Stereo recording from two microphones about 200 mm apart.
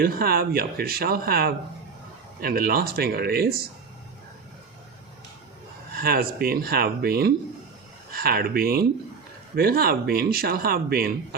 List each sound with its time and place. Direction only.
0.0 s speech: 50° right (ahead or behind)
5.9 s speech: 45° right (ahead or behind)